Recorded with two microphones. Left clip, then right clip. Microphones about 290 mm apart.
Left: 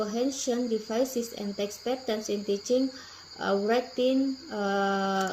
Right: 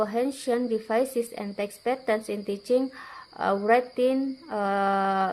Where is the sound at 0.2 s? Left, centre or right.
Right.